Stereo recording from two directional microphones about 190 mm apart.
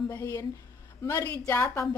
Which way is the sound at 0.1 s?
15° left (ahead or behind).